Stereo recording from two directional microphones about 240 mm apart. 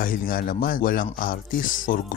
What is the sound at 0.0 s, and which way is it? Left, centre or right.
Speech, left.